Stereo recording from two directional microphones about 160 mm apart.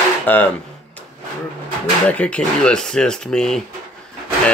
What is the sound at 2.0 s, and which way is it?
Speech, 10° left (ahead or behind).